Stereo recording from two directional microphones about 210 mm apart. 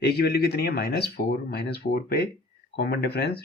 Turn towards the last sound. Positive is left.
turn(degrees=50)  # may be behind; listen again after turning